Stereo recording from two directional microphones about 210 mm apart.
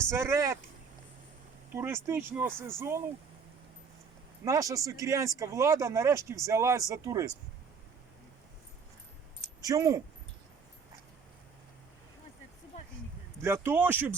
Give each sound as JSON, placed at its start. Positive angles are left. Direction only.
{"t": 0.1, "sound": "speech", "side_deg": -10}
{"t": 1.7, "sound": "speech", "side_deg": -10}
{"t": 4.4, "sound": "speech", "side_deg": -15}
{"t": 9.6, "sound": "speech", "side_deg": -15}
{"t": 13.4, "sound": "speech", "side_deg": -10}